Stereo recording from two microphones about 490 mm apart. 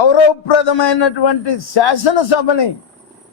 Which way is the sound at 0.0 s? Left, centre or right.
Left.